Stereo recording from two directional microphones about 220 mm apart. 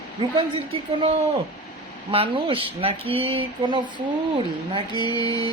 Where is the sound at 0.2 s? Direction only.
25° right (ahead or behind).